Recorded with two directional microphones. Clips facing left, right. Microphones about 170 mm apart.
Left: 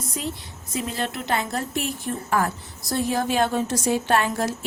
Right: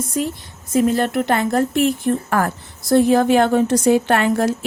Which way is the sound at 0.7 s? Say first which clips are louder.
Right 11 dB; 55° right (ahead or behind).